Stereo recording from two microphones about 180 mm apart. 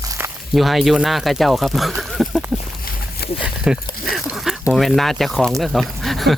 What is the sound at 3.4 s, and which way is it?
Speech, 5° right (ahead or behind).